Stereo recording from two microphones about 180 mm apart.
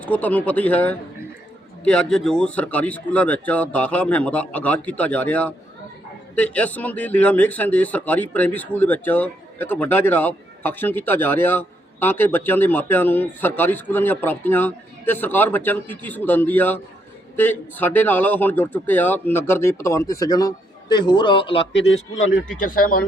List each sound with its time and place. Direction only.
0.0 s a man's voice: 10° left (ahead or behind); by 21.6 s 30° left (ahead or behind)
22.5 s speech: 50° left (ahead or behind)